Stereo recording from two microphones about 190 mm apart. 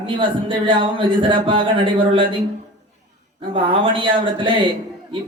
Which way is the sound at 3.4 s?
25° right (ahead or behind).